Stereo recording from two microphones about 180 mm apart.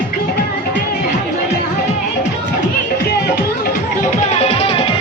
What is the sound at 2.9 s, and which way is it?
Music, 60° left (ahead or behind).